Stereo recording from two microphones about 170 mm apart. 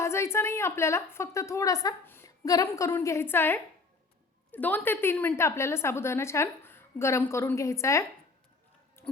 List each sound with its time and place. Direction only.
0.0 s a woman's voice: 15° left (ahead or behind)